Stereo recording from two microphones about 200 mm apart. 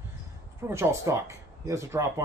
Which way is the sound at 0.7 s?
15° right (ahead or behind).